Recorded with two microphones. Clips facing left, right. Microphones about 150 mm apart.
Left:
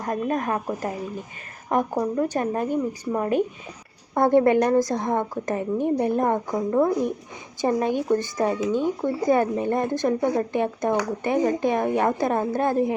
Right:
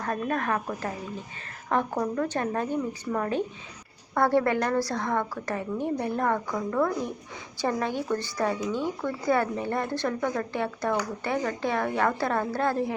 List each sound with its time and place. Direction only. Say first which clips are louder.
0.0 s speech: left 3 dB; 15° left (ahead or behind)